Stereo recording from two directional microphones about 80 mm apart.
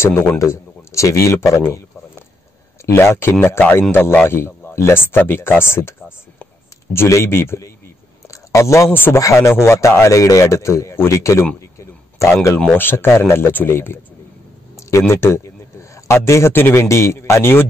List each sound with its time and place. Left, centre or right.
0.0 s a man's voice: left
2.9 s a man's voice: left
8.3 s a sound: left
8.9 s speech: left
9.2 s a man's voice: left
12.7 s a man's voice: left